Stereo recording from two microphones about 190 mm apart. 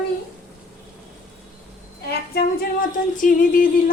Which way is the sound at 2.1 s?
50° left (ahead or behind).